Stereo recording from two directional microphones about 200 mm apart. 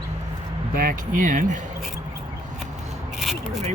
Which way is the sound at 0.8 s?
45° right (ahead or behind).